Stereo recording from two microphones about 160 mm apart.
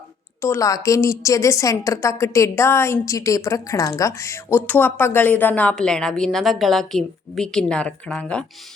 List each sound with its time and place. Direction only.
0.4 s a woman's voice: 20° left (ahead or behind)